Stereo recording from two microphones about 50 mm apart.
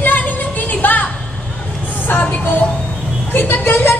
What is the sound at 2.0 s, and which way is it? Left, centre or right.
Vehicle, left.